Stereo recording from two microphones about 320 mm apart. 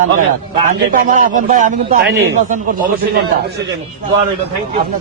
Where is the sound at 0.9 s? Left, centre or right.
Right.